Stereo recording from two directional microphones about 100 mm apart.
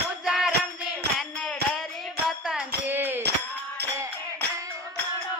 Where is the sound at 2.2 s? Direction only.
5° right (ahead or behind).